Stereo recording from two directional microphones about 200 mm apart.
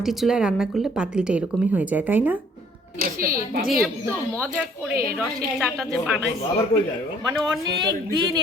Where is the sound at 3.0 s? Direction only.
45° right (ahead or behind).